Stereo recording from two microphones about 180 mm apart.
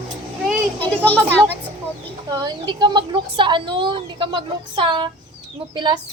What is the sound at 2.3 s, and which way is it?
Speech, 20° right (ahead or behind).